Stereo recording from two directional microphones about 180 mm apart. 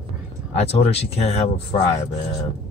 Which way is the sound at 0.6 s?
35° left (ahead or behind).